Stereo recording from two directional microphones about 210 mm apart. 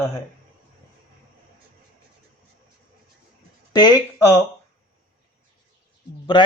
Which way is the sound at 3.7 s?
20° left (ahead or behind).